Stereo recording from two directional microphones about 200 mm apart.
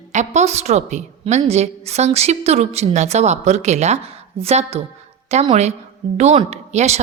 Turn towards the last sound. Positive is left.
turn(degrees=-35)  # may be behind; listen again after turning